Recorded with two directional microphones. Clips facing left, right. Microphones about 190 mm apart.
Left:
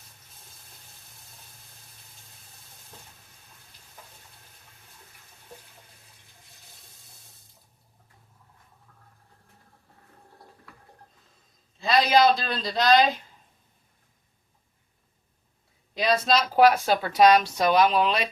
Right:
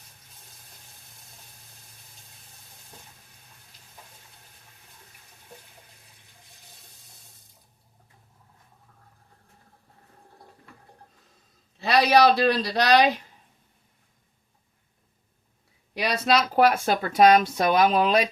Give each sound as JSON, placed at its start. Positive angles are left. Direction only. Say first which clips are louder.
{"t": 11.8, "sound": "speech", "louder": "right 1 dB", "side_deg": -70}
{"t": 16.0, "sound": "speech", "louder": "even", "side_deg": -65}